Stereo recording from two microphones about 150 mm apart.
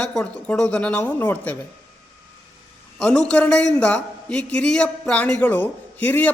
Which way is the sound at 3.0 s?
5° left (ahead or behind).